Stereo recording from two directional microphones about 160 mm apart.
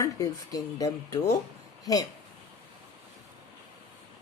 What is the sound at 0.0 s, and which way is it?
Speech, 20° left (ahead or behind).